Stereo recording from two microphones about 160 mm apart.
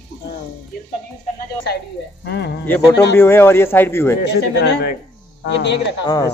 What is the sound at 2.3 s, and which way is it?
Speech, 90° left.